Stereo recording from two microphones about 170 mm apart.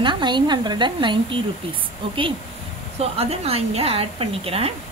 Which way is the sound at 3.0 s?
35° right (ahead or behind).